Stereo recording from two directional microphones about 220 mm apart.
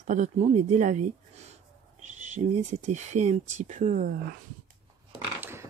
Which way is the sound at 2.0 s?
35° right (ahead or behind).